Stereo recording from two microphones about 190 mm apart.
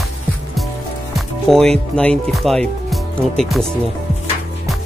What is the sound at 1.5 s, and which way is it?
Speech, centre (ahead or behind).